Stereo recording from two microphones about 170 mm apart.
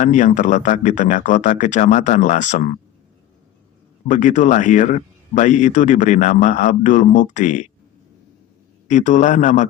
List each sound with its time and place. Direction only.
0.0 s speech: 45° left (ahead or behind)
4.1 s speech: 45° left (ahead or behind)
8.9 s speech: 45° left (ahead or behind)